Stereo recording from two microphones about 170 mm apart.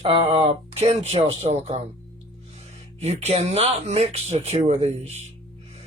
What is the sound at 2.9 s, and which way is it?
Speech, 40° right (ahead or behind).